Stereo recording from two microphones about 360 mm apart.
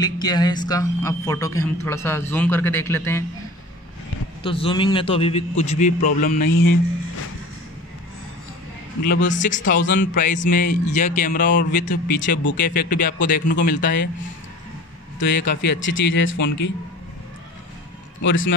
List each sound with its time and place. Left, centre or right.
0.0 s a man's voice: centre
4.4 s a man's voice: centre
9.0 s a man's voice: left
15.1 s speech: left
18.2 s speech: left